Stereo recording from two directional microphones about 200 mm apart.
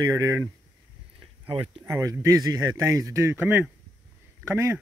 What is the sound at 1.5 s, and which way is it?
Speech, 25° right (ahead or behind).